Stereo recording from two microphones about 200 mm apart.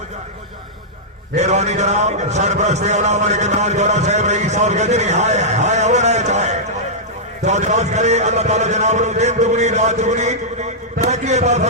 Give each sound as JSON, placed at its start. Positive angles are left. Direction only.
{"t": 1.4, "sound": "a man's voice", "side_deg": -35}